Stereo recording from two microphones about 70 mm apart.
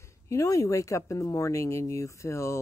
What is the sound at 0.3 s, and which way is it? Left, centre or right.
Speech, left.